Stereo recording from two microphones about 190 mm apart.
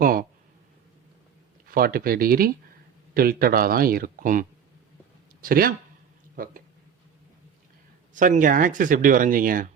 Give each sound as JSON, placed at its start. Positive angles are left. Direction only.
{"t": 0.0, "sound": "a sound", "side_deg": -50}
{"t": 1.6, "sound": "speech", "side_deg": -50}
{"t": 8.1, "sound": "speech", "side_deg": -45}